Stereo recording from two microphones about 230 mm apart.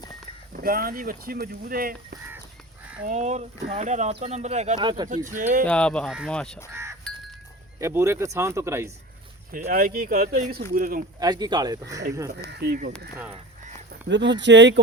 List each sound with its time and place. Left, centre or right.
0.5 s speech: right
5.0 s speech: right
5.6 s speech: centre
6.7 s wind chime: centre
7.8 s speech: centre
9.5 s speech: right
11.2 s speech: centre
12.5 s speech: right
13.9 s speech: right